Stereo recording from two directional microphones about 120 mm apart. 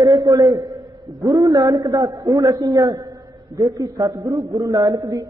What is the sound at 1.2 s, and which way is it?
A man's voice, 30° right (ahead or behind).